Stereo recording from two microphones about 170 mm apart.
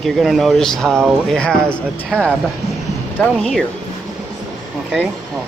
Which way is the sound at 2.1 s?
10° right (ahead or behind).